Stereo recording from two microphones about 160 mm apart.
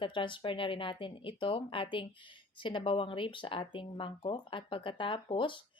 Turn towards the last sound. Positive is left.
turn(degrees=30)  # may be behind; listen again after turning